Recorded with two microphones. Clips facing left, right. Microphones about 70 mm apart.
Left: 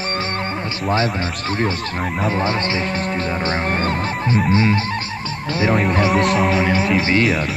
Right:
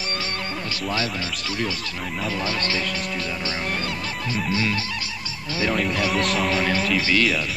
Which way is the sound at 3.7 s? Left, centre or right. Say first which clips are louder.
Left 7 dB; left.